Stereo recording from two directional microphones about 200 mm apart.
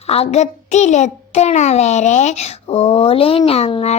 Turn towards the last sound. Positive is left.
turn(degrees=30)  # may be behind; listen again after turning